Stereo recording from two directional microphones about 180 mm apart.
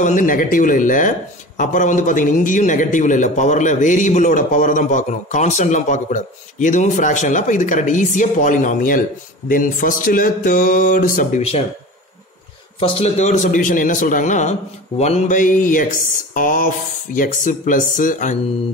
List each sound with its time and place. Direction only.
0.0 s a man's voice: 45° left (ahead or behind)
12.7 s a man's voice: 30° left (ahead or behind)